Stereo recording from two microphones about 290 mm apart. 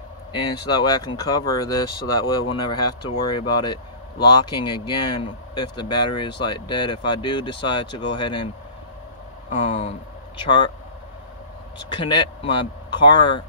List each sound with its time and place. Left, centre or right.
0.3 s speech: centre
9.5 s speech: left
11.9 s speech: centre